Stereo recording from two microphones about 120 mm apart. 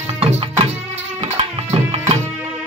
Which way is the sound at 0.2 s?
60° right (ahead or behind).